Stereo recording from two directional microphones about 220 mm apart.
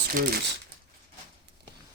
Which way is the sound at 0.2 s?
40° right (ahead or behind).